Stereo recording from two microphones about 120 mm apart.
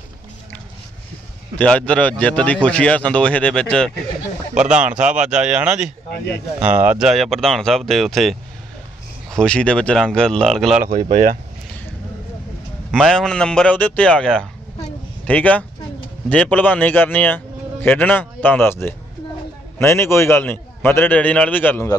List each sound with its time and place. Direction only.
1.6 s a man's voice: 10° left (ahead or behind)
4.6 s speech: 10° right (ahead or behind)
12.9 s a man's voice: 5° left (ahead or behind)